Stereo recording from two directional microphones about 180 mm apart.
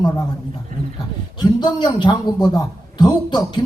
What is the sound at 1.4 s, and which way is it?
A man's voice, 25° left (ahead or behind).